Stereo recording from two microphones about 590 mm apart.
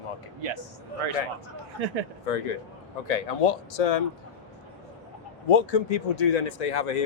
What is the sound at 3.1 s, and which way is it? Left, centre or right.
Speech, left.